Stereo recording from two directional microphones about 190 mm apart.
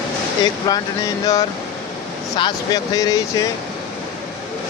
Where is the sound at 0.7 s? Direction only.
20° left (ahead or behind).